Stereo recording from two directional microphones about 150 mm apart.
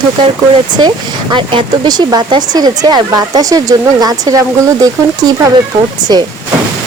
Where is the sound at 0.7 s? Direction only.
30° right (ahead or behind).